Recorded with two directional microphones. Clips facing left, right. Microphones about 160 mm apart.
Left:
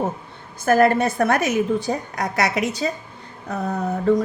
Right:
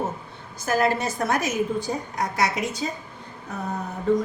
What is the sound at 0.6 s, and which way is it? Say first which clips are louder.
A woman's voice: left 6 dB; 55° left (ahead or behind).